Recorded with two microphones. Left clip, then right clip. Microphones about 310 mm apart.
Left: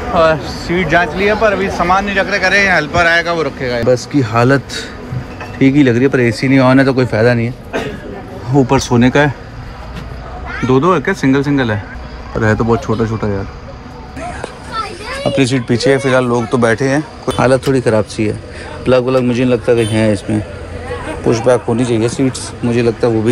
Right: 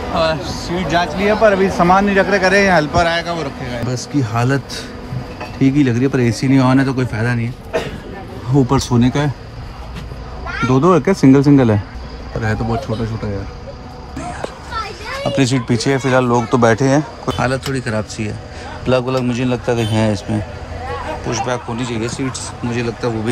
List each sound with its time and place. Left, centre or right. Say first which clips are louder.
0.1 s speech: left 6 dB; centre
8.5 s speech: left 4 dB; centre
10.7 s speech: left 2 dB; right
12.4 s speech: left 7 dB; centre
15.2 s speech: left 3 dB; centre
17.4 s speech: left 9 dB; centre
21.3 s speech: left 10 dB; centre